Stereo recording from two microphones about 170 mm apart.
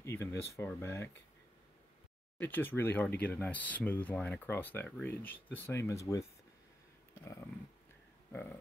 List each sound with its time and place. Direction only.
0.0 s speech: 15° left (ahead or behind)
2.3 s speech: 10° left (ahead or behind)
8.3 s speech: 10° left (ahead or behind)